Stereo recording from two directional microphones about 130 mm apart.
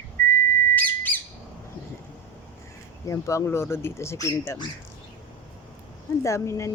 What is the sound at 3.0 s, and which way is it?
Speech, 25° left (ahead or behind).